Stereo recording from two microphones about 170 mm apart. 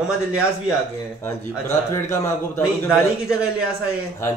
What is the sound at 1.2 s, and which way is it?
Speech, 15° left (ahead or behind).